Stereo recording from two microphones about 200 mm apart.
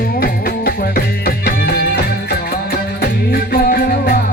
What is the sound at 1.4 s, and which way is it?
Music, 50° left (ahead or behind).